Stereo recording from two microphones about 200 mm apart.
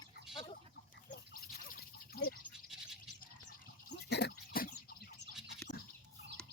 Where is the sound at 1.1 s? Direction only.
45° left (ahead or behind).